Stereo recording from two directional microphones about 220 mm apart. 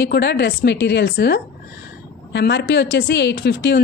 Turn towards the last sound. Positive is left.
turn(degrees=50)  # may be behind; listen again after turning